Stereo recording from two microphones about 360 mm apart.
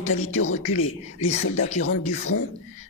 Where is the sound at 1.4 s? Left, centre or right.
Left.